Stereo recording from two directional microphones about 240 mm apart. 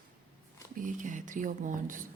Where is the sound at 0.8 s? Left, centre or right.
Right.